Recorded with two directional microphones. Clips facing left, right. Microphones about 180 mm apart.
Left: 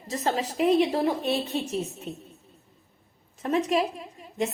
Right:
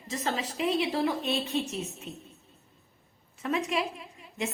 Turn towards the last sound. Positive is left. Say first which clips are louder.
# left 6 dB
turn(degrees=40)  # may be behind; listen again after turning